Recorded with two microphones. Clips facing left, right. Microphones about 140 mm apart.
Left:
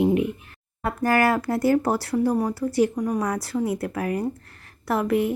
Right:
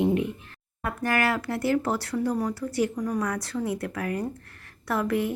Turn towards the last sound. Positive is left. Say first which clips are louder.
# left 4 dB
turn(degrees=20)  # may be behind; listen again after turning